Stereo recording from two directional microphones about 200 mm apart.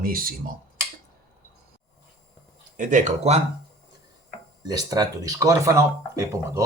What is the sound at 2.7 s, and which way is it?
Speech, 40° right (ahead or behind).